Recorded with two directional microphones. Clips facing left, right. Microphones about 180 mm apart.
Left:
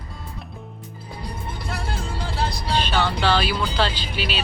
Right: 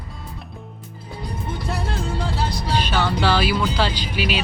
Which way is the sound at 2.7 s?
10° right (ahead or behind).